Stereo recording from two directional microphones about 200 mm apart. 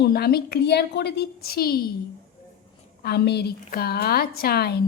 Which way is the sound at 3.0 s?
55° left (ahead or behind).